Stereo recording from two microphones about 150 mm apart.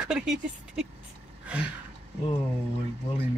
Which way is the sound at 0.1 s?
5° right (ahead or behind).